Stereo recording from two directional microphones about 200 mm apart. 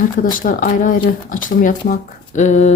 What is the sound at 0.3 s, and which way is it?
Speech, 40° left (ahead or behind).